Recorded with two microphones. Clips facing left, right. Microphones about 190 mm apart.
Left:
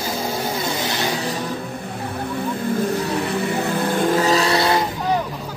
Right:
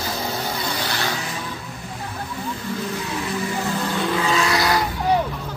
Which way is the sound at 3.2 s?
60° left (ahead or behind).